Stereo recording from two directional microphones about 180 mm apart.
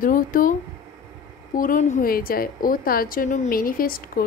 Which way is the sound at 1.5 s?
45° left (ahead or behind).